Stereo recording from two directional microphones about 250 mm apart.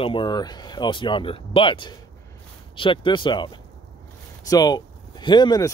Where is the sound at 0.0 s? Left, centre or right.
Centre.